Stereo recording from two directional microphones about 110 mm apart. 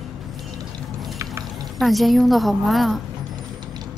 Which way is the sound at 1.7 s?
Centre (ahead or behind).